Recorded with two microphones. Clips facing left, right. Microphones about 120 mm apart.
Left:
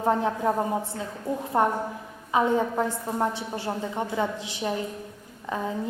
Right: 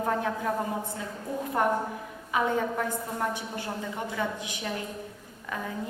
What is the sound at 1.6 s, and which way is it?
A woman's voice, 25° left (ahead or behind).